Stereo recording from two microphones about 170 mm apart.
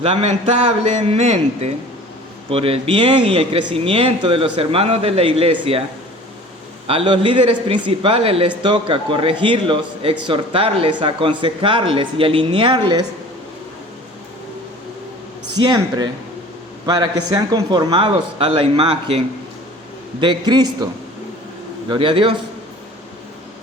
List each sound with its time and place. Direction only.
0.0 s speech: 40° right (ahead or behind)
6.8 s a man's voice: 30° right (ahead or behind)
15.5 s a man's voice: 25° right (ahead or behind)
21.8 s a man's voice: 30° right (ahead or behind)